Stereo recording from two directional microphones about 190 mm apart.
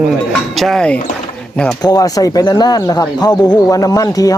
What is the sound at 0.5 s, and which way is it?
Speech, centre (ahead or behind).